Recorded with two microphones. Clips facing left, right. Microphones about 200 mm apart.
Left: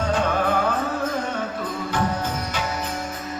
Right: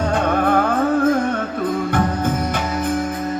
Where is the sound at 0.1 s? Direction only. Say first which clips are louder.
Right 4 dB; 55° right (ahead or behind).